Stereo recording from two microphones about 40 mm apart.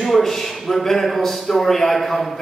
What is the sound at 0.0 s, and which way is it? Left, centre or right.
A man's voice, centre.